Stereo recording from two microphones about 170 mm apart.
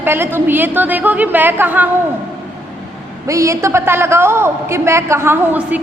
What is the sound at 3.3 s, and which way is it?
A man's voice, 20° right (ahead or behind).